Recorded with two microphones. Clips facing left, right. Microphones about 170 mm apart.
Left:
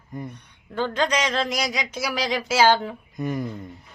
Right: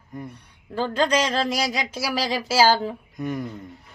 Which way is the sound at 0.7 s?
35° right (ahead or behind).